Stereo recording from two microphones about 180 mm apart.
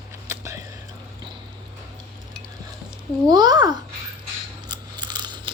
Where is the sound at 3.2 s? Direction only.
20° right (ahead or behind).